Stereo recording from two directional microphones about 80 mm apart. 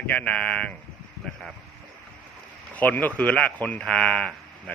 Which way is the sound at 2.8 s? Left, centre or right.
Left.